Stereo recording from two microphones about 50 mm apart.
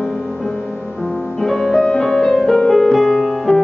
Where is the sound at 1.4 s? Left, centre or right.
Centre.